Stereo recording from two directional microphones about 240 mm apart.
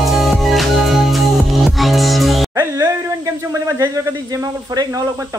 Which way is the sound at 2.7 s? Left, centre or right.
Centre.